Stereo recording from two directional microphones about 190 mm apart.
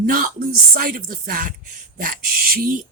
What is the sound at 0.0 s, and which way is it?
Speech, 50° right (ahead or behind).